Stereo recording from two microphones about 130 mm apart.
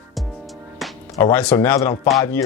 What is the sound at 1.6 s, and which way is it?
Speech, 15° left (ahead or behind).